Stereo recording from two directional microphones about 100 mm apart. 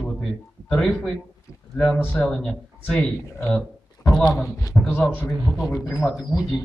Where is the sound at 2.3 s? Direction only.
5° left (ahead or behind).